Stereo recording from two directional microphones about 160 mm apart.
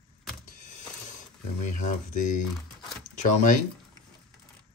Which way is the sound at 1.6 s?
50° left (ahead or behind).